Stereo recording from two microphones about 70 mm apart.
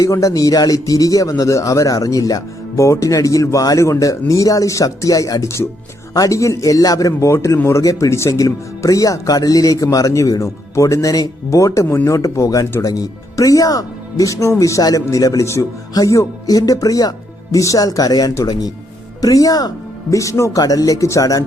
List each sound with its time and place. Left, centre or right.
0.0 s speech: left
2.8 s speech: left
20.1 s speech: left
20.6 s speech: left